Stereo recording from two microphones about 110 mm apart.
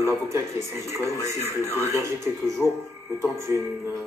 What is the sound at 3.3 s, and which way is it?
Speech, 25° right (ahead or behind).